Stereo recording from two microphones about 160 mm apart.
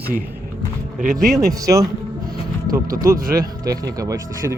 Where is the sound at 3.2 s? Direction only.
65° right (ahead or behind).